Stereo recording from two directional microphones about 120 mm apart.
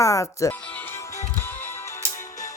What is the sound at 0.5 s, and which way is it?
Music, 15° left (ahead or behind).